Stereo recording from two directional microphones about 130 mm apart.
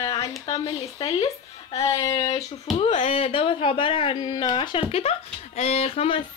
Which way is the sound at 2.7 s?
50° left (ahead or behind).